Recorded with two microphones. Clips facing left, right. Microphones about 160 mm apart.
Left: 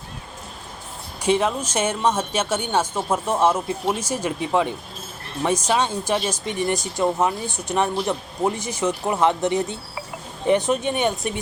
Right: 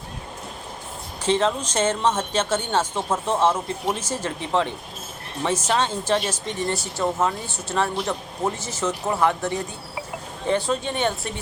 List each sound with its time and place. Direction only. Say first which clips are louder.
1.2 s a woman's voice: left 1 dB; 10° left (ahead or behind)